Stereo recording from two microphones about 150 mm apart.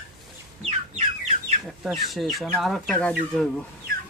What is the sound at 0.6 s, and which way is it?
Chicken, 45° right (ahead or behind).